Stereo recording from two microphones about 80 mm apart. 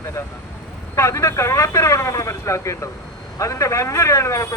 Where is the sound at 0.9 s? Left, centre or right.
Left.